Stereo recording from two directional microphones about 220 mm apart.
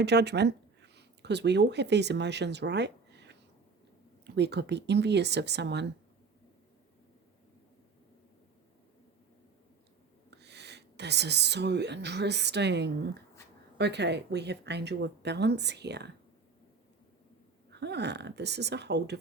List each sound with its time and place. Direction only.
0.0 s speech: 50° right (ahead or behind)
4.4 s speech: 50° right (ahead or behind)
10.3 s speech: 50° right (ahead or behind)
17.7 s speech: 50° right (ahead or behind)